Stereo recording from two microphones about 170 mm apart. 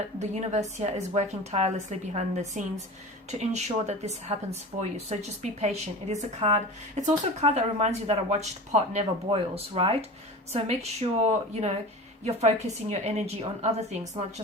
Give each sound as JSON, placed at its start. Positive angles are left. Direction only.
{"t": 0.2, "sound": "a woman's voice", "side_deg": -40}